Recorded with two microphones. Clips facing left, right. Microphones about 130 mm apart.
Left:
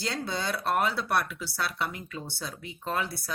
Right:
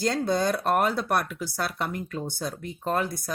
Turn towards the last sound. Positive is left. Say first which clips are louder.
# right 5 dB
turn(degrees=-45)  # may be behind; listen again after turning